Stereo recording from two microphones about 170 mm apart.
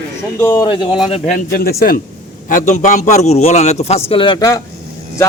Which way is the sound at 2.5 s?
50° left (ahead or behind).